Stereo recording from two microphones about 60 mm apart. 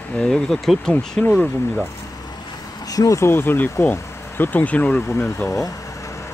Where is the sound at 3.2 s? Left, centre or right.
Left.